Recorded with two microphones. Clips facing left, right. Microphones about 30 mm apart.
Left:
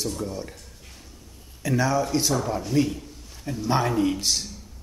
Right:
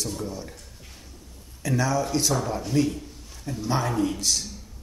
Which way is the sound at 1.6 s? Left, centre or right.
Centre.